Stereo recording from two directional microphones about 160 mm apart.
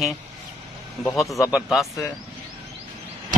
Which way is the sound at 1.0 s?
Centre (ahead or behind).